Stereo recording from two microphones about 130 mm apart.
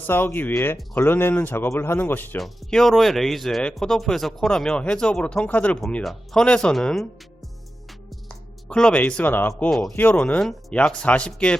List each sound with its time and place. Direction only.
0.1 s speech: 15° left (ahead or behind)
2.4 s speech: 5° left (ahead or behind)
8.3 s speech: 5° left (ahead or behind)
9.6 s speech: centre (ahead or behind)
9.9 s speech: 15° left (ahead or behind)